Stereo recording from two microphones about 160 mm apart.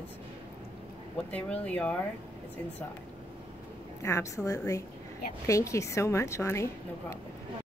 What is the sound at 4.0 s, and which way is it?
A woman's voice, 15° left (ahead or behind).